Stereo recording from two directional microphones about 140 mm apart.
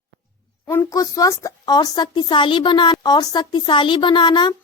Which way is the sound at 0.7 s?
20° left (ahead or behind).